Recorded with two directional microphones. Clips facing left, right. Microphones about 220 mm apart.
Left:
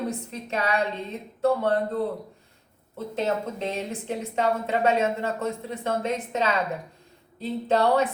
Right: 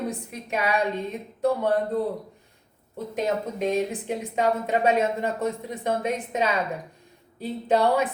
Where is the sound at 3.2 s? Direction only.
10° right (ahead or behind).